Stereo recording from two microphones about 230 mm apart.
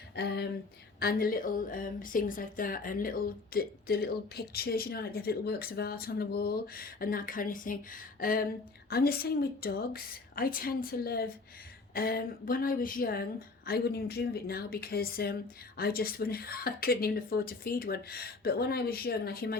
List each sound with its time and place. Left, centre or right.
0.2 s a woman's voice: left